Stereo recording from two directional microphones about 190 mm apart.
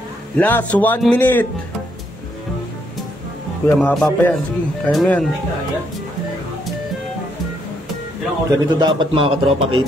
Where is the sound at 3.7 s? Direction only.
5° left (ahead or behind).